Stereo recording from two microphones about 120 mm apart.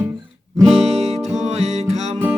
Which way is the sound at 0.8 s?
60° right (ahead or behind).